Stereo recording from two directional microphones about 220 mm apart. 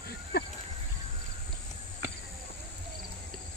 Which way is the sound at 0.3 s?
50° left (ahead or behind).